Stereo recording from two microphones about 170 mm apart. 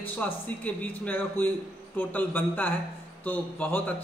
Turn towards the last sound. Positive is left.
turn(degrees=10)  # may be behind; listen again after turning